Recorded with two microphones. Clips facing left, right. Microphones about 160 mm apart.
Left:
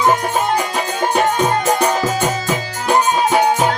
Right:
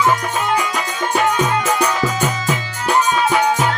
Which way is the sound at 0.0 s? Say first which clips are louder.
Left 2 dB; 40° left (ahead or behind).